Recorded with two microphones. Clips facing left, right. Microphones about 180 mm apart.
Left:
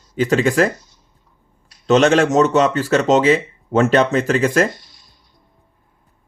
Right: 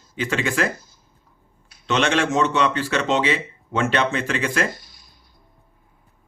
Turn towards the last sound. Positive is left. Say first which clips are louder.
# left 1 dB
turn(degrees=0)  # may be behind; listen again after turning